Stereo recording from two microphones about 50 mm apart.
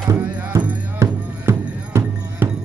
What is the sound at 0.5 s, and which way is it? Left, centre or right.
Music, right.